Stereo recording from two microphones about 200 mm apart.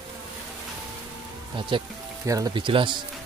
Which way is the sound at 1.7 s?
25° right (ahead or behind).